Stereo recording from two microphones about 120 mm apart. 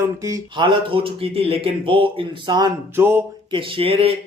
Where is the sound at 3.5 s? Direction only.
45° right (ahead or behind).